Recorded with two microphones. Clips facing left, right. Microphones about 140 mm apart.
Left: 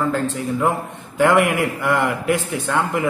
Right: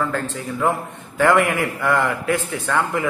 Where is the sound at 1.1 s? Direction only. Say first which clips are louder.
Left 1 dB; 15° left (ahead or behind).